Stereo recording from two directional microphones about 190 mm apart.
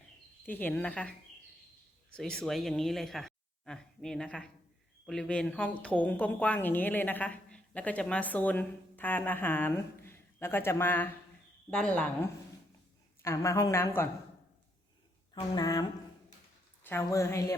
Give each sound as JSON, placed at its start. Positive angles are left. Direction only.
{"t": 0.4, "sound": "a woman's voice", "side_deg": 10}
{"t": 13.2, "sound": "a woman's voice", "side_deg": 15}
{"t": 15.4, "sound": "a woman's voice", "side_deg": 20}